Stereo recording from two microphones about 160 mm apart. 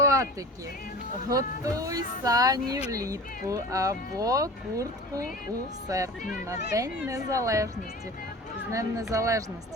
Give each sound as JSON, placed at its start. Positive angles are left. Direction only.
{"t": 0.0, "sound": "a sound", "side_deg": -20}
{"t": 1.3, "sound": "speech", "side_deg": -20}
{"t": 8.7, "sound": "speech", "side_deg": -20}